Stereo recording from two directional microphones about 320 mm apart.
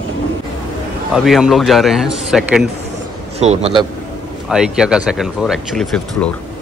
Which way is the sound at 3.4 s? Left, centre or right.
Centre.